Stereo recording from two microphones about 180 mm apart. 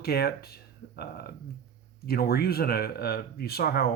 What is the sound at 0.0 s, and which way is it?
Speech, 60° left (ahead or behind).